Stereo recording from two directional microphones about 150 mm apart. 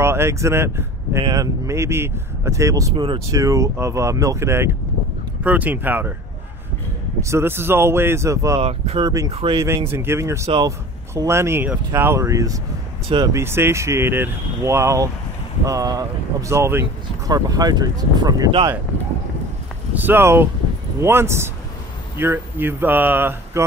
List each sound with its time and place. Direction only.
0.0 s speech: 15° right (ahead or behind)
7.2 s speech: 20° right (ahead or behind)
8.5 s speech: 40° right (ahead or behind)
9.0 s speech: 20° right (ahead or behind)
9.3 s speech: 40° right (ahead or behind)
9.8 s speech: 15° right (ahead or behind)
19.9 s speech: 15° right (ahead or behind)